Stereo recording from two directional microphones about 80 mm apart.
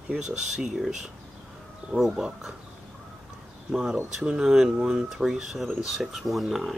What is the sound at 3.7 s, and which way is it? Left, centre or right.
Speech, centre.